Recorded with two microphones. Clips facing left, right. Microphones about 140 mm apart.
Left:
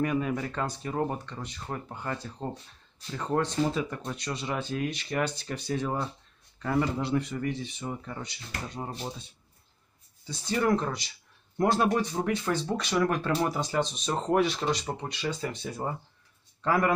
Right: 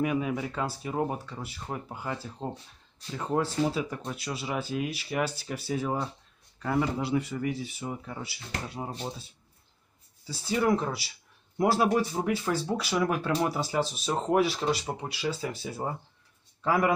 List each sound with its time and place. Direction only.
0.0 s speech: 5° right (ahead or behind)
10.2 s speech: 5° right (ahead or behind)